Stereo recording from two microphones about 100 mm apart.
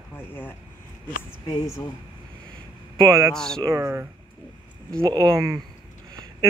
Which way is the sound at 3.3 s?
5° left (ahead or behind).